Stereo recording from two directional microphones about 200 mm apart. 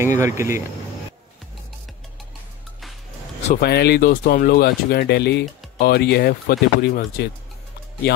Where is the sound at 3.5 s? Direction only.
55° left (ahead or behind).